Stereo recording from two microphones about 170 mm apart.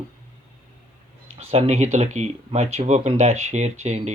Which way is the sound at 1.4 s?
35° right (ahead or behind).